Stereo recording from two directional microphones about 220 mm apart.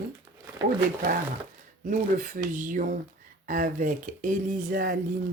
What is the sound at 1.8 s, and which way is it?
Speech, 35° right (ahead or behind).